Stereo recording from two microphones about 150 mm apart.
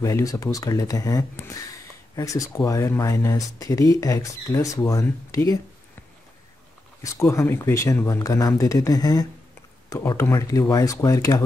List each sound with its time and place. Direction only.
0.0 s speech: 20° left (ahead or behind)
7.0 s speech: 20° left (ahead or behind)